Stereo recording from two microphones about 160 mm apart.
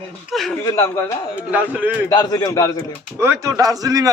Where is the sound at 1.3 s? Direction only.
10° right (ahead or behind).